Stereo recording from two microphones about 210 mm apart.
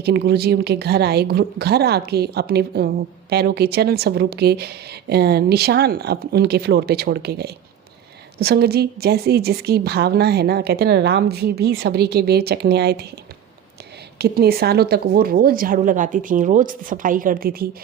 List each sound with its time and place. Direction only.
0.0 s speech: 50° right (ahead or behind)
14.2 s speech: 45° right (ahead or behind)